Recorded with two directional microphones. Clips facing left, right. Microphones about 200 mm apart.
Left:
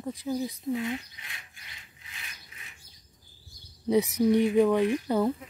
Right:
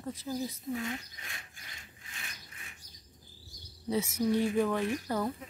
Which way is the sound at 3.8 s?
15° left (ahead or behind).